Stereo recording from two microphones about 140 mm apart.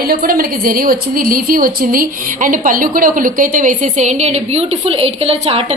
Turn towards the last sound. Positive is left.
turn(degrees=-45)  # may be behind; listen again after turning